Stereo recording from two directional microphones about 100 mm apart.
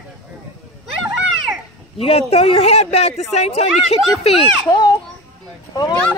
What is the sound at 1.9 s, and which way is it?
Speech, 70° left (ahead or behind).